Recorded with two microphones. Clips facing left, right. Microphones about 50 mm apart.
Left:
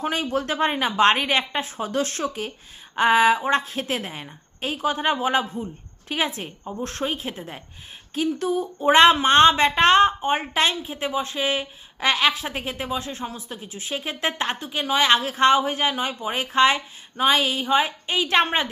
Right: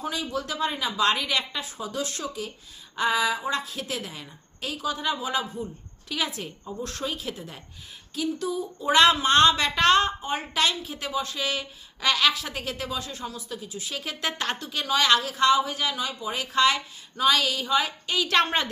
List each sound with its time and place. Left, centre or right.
0.0 s a woman's voice: left